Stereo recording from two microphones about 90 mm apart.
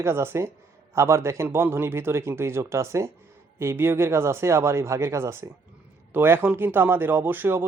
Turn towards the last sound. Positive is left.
turn(degrees=-25)  # may be behind; listen again after turning